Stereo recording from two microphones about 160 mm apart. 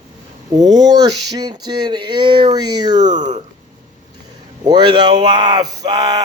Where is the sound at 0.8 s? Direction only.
25° right (ahead or behind).